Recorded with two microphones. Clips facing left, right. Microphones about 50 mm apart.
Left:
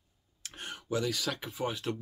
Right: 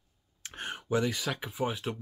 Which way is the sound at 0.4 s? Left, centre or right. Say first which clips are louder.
Right 4 dB; right.